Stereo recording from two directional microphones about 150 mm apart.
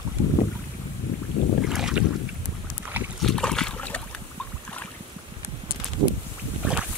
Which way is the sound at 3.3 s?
5° left (ahead or behind).